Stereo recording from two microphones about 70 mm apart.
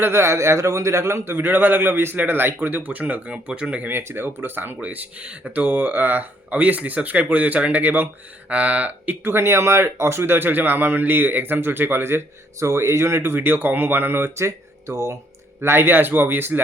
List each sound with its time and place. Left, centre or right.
0.0 s speech: right; by 3.8 s centre
3.8 s speech: right
9.2 s speech: right
15.6 s speech: right